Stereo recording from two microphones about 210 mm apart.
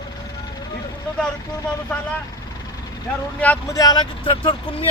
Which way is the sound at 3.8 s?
20° left (ahead or behind).